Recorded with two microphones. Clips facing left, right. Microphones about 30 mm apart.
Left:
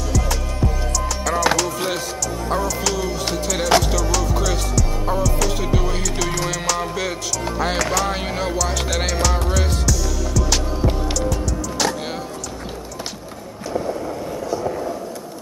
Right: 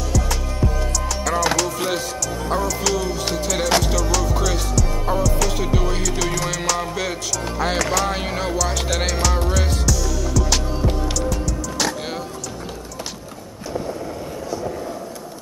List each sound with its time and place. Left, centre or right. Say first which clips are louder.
0.1 s music: right 1 dB; centre
13.7 s vehicle: left 3 dB; centre